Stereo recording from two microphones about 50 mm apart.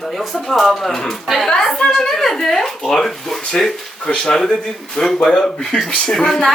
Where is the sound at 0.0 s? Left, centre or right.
Centre.